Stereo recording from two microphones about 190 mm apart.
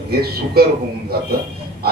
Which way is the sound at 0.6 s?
55° right (ahead or behind).